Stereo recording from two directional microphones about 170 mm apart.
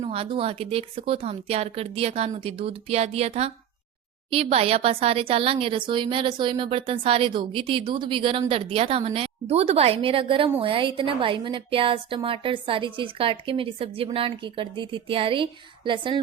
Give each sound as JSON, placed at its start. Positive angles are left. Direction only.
{"t": 0.0, "sound": "speech", "side_deg": -35}